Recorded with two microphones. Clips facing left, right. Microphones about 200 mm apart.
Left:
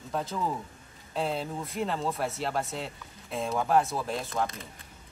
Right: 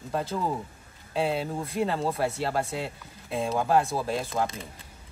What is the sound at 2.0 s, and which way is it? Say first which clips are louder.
Chicken: right 4 dB; 30° right (ahead or behind).